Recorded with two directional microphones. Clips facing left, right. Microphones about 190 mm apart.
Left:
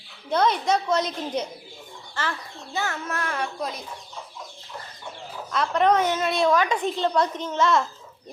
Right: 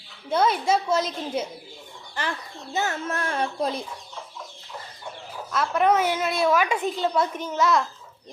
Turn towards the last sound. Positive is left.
turn(degrees=0)  # may be behind; listen again after turning